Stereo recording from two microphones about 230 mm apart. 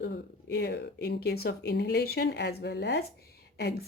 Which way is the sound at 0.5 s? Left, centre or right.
Left.